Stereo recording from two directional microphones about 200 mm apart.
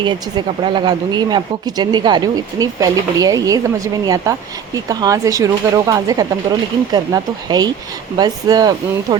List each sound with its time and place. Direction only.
0.0 s speech: 20° right (ahead or behind)